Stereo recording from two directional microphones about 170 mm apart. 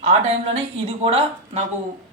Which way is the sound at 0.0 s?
40° right (ahead or behind).